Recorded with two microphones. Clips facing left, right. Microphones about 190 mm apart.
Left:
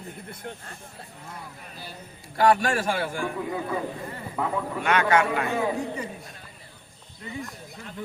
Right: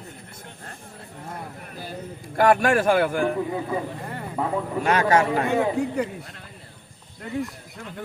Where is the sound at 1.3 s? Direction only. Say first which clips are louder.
Right 7 dB; 50° right (ahead or behind).